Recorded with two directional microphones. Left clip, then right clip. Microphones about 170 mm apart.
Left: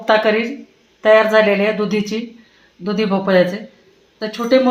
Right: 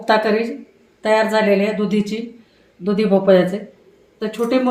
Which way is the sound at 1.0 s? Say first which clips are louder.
Left 5 dB; 35° left (ahead or behind).